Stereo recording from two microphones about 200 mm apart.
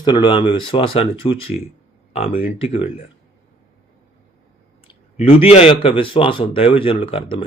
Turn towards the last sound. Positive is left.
turn(degrees=30)  # may be behind; listen again after turning